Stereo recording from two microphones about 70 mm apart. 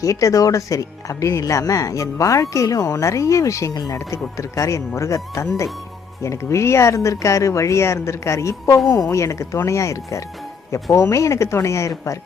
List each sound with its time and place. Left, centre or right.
0.0 s speech: left